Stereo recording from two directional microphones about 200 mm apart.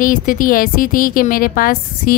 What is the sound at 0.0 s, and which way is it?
Speech, 45° left (ahead or behind).